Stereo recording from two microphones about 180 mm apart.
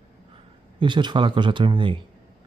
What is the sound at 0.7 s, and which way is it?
Speech, 25° right (ahead or behind).